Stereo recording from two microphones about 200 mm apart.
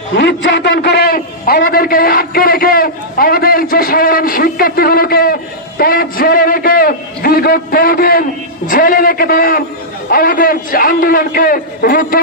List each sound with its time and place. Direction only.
0.1 s a man's voice: 55° left (ahead or behind)